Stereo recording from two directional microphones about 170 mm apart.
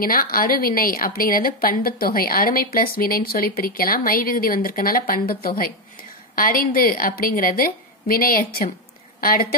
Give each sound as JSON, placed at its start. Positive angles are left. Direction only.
{"t": 0.0, "sound": "a woman's voice", "side_deg": 55}